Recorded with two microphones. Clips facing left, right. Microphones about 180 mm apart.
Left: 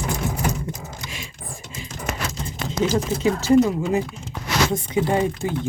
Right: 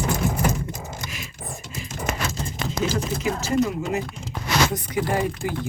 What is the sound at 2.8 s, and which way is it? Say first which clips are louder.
Speech: left 5 dB; 30° left (ahead or behind).